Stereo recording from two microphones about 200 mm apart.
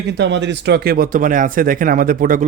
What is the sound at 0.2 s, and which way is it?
A man's voice, 60° right (ahead or behind).